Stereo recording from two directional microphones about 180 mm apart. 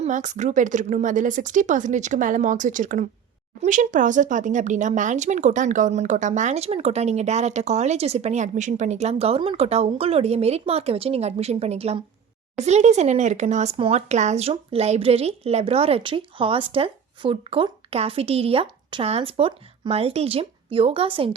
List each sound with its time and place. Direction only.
0.0 s speech: 40° right (ahead or behind)